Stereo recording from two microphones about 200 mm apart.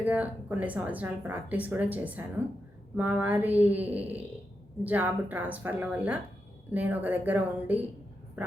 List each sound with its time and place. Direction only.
0.0 s a woman's voice: 5° right (ahead or behind)